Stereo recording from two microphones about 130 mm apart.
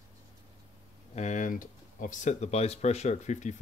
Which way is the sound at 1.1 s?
65° left (ahead or behind).